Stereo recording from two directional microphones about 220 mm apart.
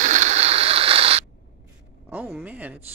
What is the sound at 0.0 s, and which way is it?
Mechanisms, 35° right (ahead or behind).